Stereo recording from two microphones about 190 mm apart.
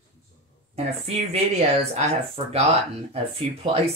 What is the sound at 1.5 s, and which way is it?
Speech, 35° right (ahead or behind).